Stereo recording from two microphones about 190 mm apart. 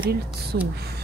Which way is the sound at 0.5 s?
50° right (ahead or behind).